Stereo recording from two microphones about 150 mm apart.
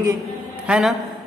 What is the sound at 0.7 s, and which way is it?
Speech, centre (ahead or behind).